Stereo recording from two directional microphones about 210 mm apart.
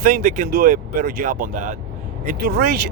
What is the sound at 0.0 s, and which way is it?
Speech, 40° right (ahead or behind).